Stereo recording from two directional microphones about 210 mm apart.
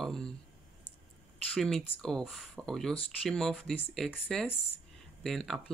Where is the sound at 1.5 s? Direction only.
5° left (ahead or behind).